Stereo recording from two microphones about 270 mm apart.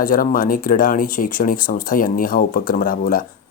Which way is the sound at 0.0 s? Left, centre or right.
Left.